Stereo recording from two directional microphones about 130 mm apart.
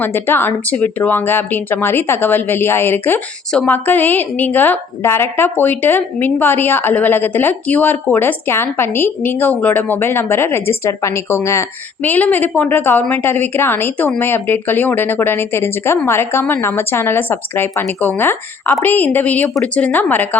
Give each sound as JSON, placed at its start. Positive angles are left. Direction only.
{"t": 0.0, "sound": "a woman's voice", "side_deg": 15}